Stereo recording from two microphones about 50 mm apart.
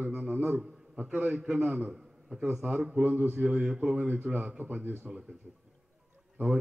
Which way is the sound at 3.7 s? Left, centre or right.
Centre.